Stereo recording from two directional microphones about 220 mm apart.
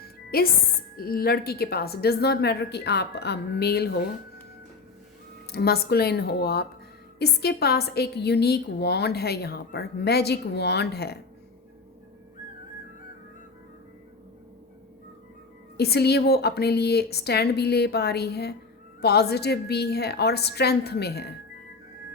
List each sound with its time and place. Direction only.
0.0 s music: 45° left (ahead or behind)
0.9 s a woman's voice: 45° left (ahead or behind)
5.5 s a woman's voice: 45° left (ahead or behind)
15.8 s a woman's voice: 45° left (ahead or behind)